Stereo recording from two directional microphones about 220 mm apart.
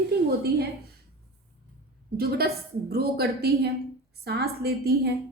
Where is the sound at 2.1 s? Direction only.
45° right (ahead or behind).